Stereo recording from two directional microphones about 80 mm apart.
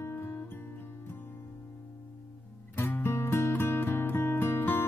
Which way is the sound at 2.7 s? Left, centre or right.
Left.